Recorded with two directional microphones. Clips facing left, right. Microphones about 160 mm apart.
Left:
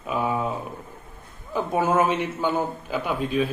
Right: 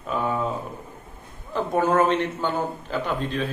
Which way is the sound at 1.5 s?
10° left (ahead or behind).